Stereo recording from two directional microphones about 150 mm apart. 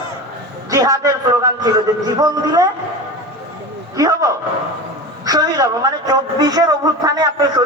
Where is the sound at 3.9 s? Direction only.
25° right (ahead or behind).